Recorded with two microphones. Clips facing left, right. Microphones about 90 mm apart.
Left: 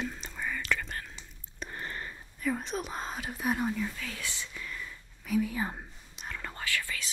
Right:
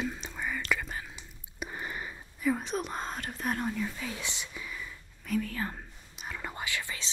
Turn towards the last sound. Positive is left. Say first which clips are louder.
# left 1 dB
turn(degrees=-20)  # may be behind; listen again after turning